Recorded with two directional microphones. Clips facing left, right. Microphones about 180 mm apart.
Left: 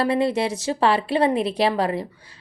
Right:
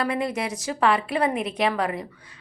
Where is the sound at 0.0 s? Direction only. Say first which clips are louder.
Left 5 dB; 30° left (ahead or behind).